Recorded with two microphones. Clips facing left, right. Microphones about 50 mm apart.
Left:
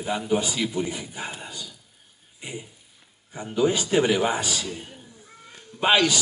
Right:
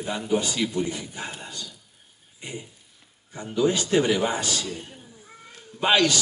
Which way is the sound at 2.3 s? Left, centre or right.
Centre.